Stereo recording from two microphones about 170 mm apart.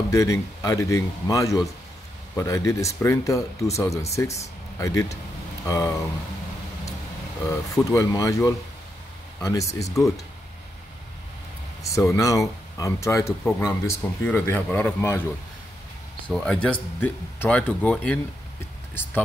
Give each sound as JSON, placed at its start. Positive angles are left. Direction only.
{"t": 0.1, "sound": "a man's voice", "side_deg": 20}
{"t": 7.4, "sound": "a man's voice", "side_deg": 20}
{"t": 11.9, "sound": "speech", "side_deg": 15}
{"t": 16.3, "sound": "speech", "side_deg": 5}